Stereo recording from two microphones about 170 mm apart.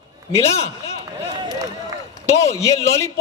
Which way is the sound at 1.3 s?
20° right (ahead or behind).